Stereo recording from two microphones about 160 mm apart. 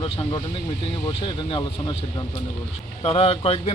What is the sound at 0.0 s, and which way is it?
Speech, 35° left (ahead or behind).